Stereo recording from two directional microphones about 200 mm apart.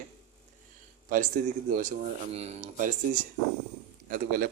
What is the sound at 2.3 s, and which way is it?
A man's voice, 35° right (ahead or behind).